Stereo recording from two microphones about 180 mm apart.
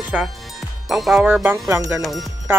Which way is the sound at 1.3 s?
10° right (ahead or behind).